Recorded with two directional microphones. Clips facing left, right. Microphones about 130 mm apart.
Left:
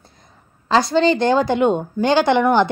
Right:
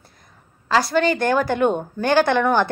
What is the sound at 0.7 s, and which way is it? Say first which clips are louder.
A woman's voice: left 3 dB; 25° left (ahead or behind).